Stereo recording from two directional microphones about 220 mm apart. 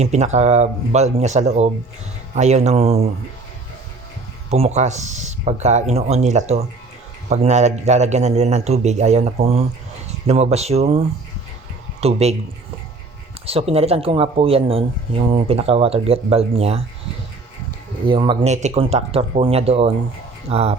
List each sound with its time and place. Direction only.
0.0 s a man's voice: 30° right (ahead or behind)
4.5 s a man's voice: 30° right (ahead or behind)
13.4 s speech: 25° right (ahead or behind)
18.0 s speech: 20° right (ahead or behind)